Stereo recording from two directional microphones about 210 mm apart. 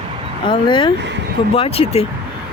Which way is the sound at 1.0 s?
55° right (ahead or behind).